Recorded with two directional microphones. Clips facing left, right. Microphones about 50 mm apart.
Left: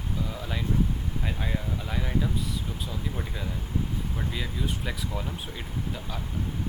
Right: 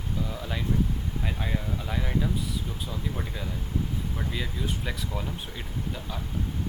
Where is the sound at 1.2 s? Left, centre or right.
Centre.